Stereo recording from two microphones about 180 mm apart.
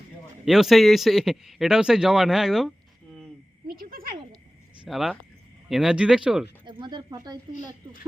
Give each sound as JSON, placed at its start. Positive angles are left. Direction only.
{"t": 0.4, "sound": "speech", "side_deg": 0}
{"t": 3.7, "sound": "a sound", "side_deg": -55}
{"t": 4.9, "sound": "speech", "side_deg": 0}
{"t": 6.7, "sound": "speech", "side_deg": -25}